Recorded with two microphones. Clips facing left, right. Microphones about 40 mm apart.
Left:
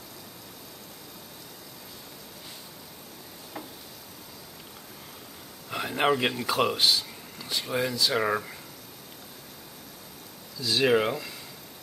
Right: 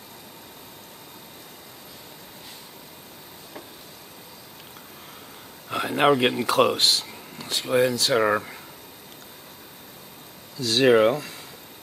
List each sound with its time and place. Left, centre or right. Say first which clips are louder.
5.7 s speech: right 5 dB; right
8.2 s speech: right 7 dB; right
10.6 s speech: right 4 dB; right
10.9 s speech: right 8 dB; right